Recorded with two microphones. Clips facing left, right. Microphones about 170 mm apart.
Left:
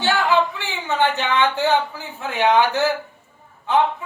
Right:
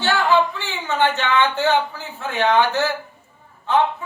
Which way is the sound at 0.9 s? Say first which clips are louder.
Even; 15° left (ahead or behind).